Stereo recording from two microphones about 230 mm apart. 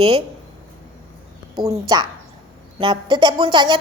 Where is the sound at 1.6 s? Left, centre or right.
Centre.